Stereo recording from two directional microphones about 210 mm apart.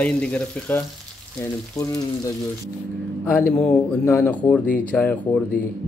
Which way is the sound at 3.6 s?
5° left (ahead or behind).